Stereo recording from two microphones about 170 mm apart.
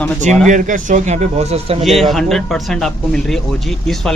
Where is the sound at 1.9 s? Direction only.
Centre (ahead or behind).